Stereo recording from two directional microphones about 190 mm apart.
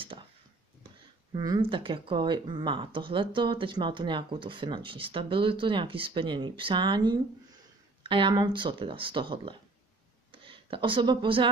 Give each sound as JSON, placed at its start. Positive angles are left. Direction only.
{"t": 1.3, "sound": "speech", "side_deg": -20}